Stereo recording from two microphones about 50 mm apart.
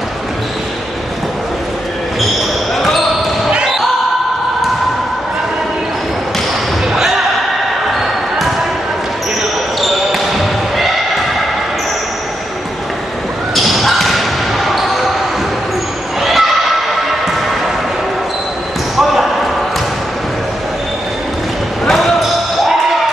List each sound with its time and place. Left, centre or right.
3.4 s basketball bounce: centre
9.8 s basketball bounce: centre
13.6 s a sound: centre
16.2 s neigh: centre
21.8 s basketball bounce: centre